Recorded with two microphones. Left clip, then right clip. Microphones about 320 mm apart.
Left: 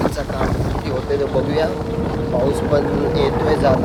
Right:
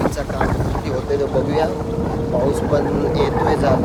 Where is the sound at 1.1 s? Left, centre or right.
Centre.